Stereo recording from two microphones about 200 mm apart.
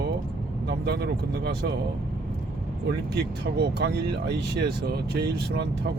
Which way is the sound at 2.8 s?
55° right (ahead or behind).